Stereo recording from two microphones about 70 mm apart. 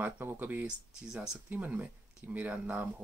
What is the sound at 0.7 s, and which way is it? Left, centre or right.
Speech, centre.